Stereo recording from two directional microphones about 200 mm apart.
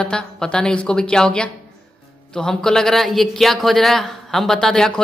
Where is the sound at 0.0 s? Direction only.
5° left (ahead or behind).